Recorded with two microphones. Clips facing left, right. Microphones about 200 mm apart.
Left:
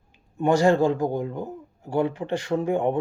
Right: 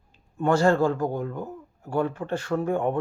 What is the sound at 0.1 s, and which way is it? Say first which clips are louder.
A man's voice: left 2 dB; 15° left (ahead or behind).